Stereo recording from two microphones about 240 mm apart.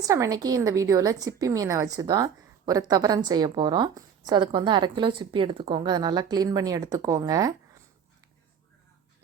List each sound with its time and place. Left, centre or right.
0.0 s a woman's voice: centre